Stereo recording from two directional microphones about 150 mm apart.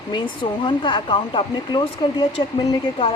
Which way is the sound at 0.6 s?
30° left (ahead or behind).